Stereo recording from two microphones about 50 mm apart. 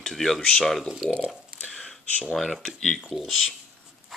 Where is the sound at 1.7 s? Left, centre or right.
Centre.